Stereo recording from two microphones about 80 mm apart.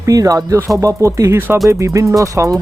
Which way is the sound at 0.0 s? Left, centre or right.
Right.